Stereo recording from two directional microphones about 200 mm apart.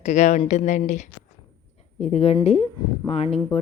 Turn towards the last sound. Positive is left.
turn(degrees=30)  # may be behind; listen again after turning